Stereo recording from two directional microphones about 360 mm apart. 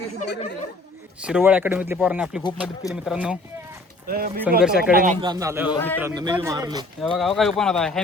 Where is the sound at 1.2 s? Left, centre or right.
Centre.